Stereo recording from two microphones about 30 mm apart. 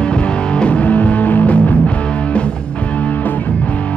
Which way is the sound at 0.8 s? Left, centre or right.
Left.